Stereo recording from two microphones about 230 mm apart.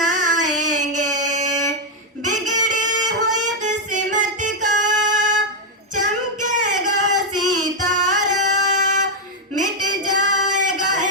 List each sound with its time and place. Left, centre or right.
0.1 s child singing: right
2.2 s music: right
5.9 s female singing: right
6.8 s a sound: right
7.5 s music: right
9.6 s a sound: right